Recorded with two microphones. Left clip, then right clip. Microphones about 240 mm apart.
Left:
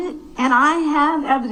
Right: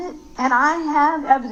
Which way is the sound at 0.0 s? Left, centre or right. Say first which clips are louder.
Left 1 dB; left.